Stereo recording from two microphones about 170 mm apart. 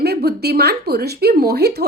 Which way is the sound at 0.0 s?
70° right (ahead or behind).